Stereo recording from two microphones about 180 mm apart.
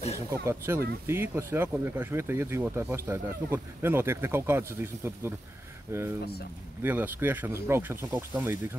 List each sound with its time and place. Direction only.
0.3 s speech: 15° right (ahead or behind)